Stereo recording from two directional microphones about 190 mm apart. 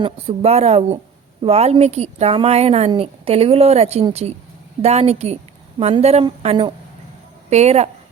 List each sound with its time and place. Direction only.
0.0 s a woman's voice: 30° right (ahead or behind)